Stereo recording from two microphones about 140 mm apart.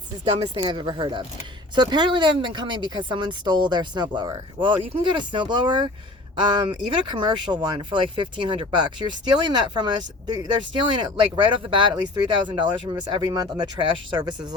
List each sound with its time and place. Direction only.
0.4 s speech: 35° right (ahead or behind)